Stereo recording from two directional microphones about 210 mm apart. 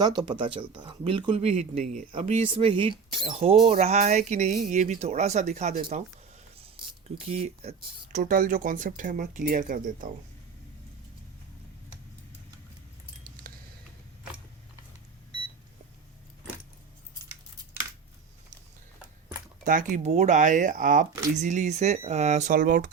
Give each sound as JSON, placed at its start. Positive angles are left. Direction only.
{"t": 0.0, "sound": "speech", "side_deg": -20}
{"t": 2.1, "sound": "speech", "side_deg": -25}
{"t": 7.2, "sound": "speech", "side_deg": -30}
{"t": 7.8, "sound": "speech", "side_deg": -40}
{"t": 19.6, "sound": "speech", "side_deg": -40}